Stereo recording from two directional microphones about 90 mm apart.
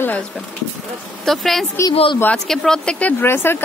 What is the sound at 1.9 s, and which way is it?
Speech, 85° left.